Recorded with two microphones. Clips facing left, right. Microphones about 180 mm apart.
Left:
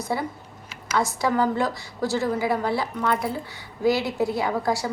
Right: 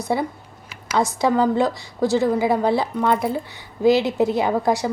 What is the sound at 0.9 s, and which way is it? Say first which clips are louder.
A woman's voice: right 4 dB; 15° right (ahead or behind).